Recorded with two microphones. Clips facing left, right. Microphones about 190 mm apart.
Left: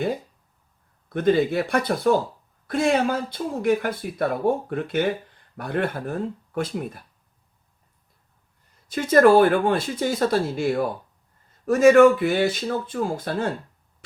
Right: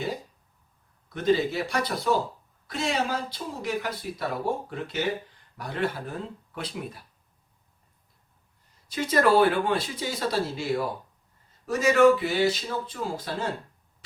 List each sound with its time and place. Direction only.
1.1 s speech: 55° left (ahead or behind)
8.9 s speech: 50° left (ahead or behind)